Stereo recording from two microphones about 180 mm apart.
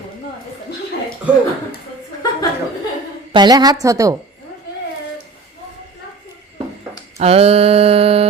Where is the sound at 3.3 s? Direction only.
25° right (ahead or behind).